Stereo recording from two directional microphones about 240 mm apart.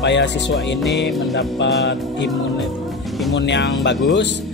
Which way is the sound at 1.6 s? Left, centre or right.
Left.